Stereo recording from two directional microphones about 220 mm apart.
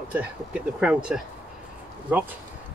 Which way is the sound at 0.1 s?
5° right (ahead or behind).